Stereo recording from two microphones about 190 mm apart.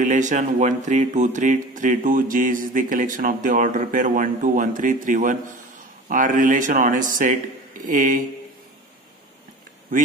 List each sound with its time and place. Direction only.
0.0 s speech: 40° right (ahead or behind)